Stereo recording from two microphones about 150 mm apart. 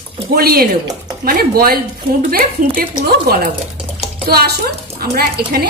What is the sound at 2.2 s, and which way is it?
Speech, 75° right (ahead or behind).